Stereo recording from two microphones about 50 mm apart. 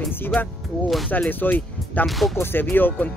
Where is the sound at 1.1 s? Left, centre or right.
Left.